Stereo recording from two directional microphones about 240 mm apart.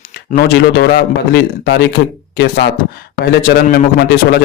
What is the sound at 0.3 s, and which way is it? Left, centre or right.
A man's voice, left.